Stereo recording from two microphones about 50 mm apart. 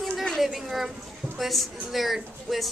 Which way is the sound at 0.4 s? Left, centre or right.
Centre.